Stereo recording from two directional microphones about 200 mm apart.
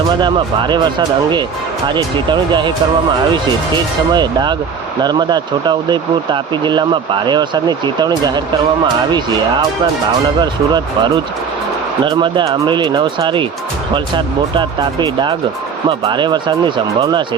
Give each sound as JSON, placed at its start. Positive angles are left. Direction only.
{"t": 0.2, "sound": "speech", "side_deg": -25}
{"t": 4.1, "sound": "speech", "side_deg": -20}
{"t": 10.4, "sound": "speech", "side_deg": -20}
{"t": 12.0, "sound": "speech", "side_deg": -20}